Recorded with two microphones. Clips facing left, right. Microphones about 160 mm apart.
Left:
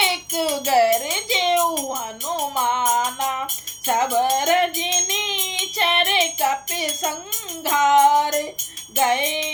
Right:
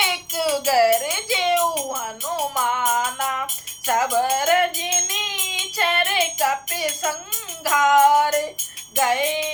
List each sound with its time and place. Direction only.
0.0 s music: 25° left (ahead or behind)